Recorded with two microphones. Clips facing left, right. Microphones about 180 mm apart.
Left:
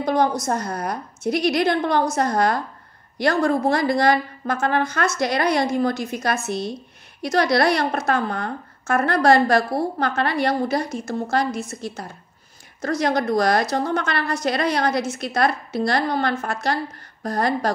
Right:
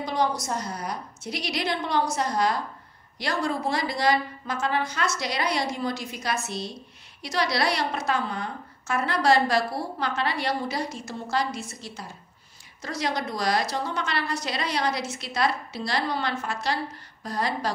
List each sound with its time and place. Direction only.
0.0 s a woman's voice: 50° left (ahead or behind)